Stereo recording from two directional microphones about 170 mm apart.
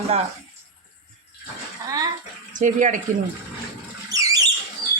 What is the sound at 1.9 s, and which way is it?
Bathtub, 20° right (ahead or behind).